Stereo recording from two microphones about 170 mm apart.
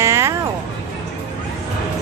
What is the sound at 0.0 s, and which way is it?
Music, 15° right (ahead or behind).